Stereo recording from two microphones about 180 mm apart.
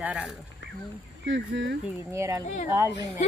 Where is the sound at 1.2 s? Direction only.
90° right.